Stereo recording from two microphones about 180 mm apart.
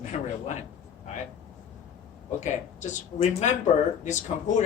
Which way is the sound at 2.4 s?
40° left (ahead or behind).